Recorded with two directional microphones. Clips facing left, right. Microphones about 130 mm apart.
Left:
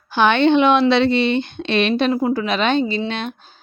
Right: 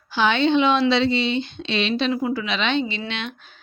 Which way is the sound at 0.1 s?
55° left (ahead or behind).